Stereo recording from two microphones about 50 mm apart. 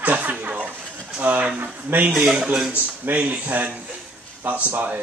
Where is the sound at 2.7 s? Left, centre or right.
Right.